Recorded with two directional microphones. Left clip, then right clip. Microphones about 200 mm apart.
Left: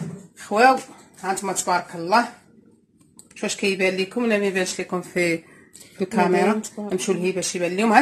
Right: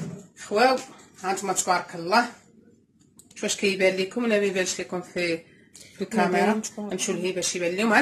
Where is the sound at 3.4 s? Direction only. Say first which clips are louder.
Left 1 dB; 25° left (ahead or behind).